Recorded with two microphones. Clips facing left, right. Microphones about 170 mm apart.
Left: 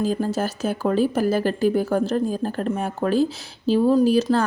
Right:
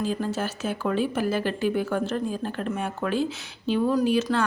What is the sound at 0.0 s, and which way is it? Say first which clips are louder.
Speech: left 4 dB; 40° left (ahead or behind).